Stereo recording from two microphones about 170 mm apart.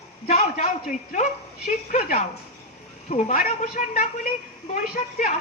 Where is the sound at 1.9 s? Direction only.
50° left (ahead or behind).